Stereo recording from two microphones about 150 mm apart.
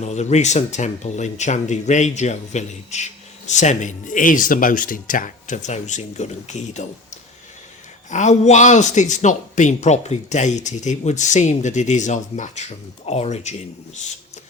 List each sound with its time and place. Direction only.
0.0 s speech: 50° left (ahead or behind)